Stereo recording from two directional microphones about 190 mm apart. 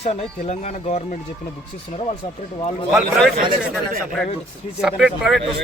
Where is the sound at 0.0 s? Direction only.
35° left (ahead or behind).